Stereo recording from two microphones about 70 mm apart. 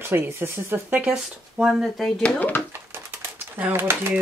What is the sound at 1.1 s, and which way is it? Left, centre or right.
Speech, centre.